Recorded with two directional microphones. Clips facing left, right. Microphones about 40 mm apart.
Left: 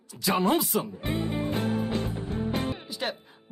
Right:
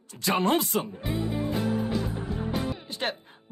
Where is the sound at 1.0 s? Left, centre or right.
Left.